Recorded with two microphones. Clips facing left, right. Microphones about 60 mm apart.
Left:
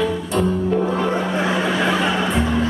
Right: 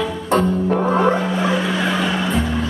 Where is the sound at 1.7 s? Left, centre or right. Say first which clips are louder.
Left 1 dB; centre.